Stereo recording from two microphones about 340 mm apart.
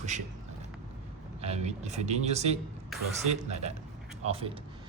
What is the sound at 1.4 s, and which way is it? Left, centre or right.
Speech, centre.